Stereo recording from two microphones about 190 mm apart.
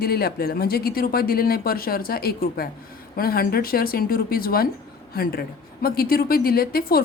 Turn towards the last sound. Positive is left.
turn(degrees=55)  # may be behind; listen again after turning